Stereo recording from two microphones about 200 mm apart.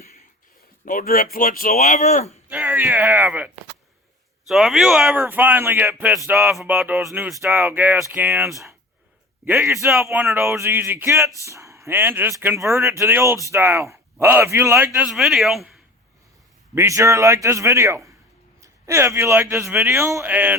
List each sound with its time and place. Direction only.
0.9 s speech: 45° left (ahead or behind)
2.5 s speech: 10° right (ahead or behind)
16.7 s speech: 15° right (ahead or behind)